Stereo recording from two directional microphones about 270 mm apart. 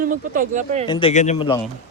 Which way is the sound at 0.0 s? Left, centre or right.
Right.